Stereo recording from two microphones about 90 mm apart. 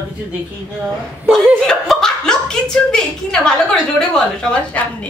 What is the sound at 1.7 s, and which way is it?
Chuckle, 5° left (ahead or behind).